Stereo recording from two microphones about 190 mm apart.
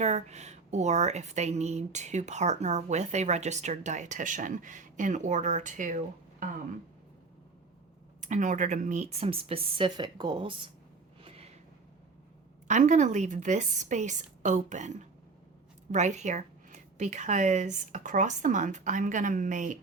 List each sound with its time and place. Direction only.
0.0 s a woman's voice: 35° right (ahead or behind)
8.2 s a woman's voice: 40° right (ahead or behind)
11.2 s a sound: 30° right (ahead or behind)
12.6 s a woman's voice: 40° right (ahead or behind)